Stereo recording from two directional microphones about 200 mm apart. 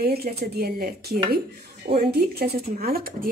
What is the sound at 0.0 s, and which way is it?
Speech, 50° right (ahead or behind).